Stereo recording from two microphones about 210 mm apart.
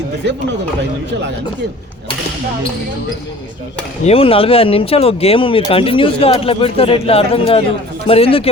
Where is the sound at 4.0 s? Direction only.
25° left (ahead or behind).